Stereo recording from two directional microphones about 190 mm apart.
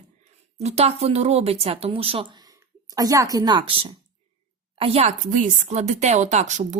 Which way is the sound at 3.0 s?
20° right (ahead or behind).